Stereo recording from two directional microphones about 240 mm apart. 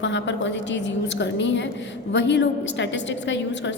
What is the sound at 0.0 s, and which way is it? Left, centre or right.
A woman's voice, left.